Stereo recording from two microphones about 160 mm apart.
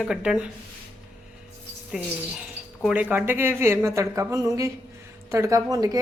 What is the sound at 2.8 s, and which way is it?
A woman's voice, 10° right (ahead or behind).